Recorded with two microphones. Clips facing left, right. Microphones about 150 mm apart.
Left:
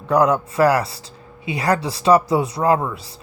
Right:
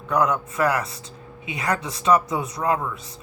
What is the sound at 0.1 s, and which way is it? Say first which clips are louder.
A man's voice: left 5 dB; 35° left (ahead or behind).